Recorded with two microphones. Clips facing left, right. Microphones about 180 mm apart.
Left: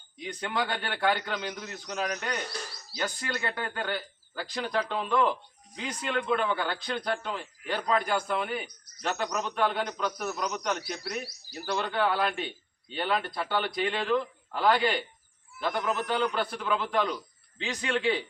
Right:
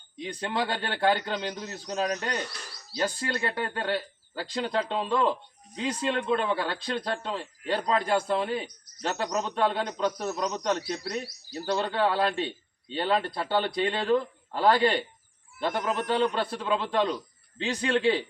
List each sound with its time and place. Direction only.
0.2 s a man's voice: 30° right (ahead or behind)